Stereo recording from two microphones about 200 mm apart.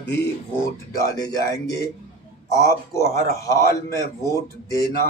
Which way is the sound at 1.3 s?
15° left (ahead or behind).